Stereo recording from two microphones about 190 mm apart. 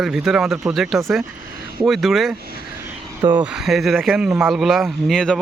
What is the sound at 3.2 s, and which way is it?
Speech, 25° right (ahead or behind).